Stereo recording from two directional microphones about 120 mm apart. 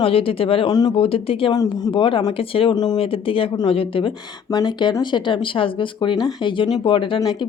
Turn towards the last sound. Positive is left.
turn(degrees=45)  # may be behind; listen again after turning